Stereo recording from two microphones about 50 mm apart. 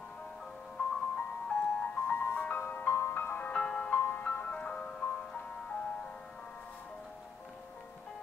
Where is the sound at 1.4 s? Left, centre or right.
Left.